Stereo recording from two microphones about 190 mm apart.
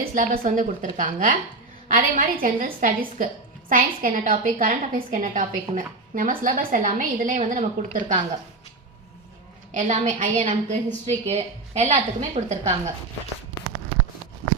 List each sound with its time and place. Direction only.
0.0 s a woman's voice: 40° right (ahead or behind)
9.7 s a woman's voice: 40° right (ahead or behind)